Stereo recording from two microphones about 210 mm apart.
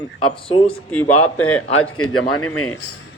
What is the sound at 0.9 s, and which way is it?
Speech, 5° left (ahead or behind).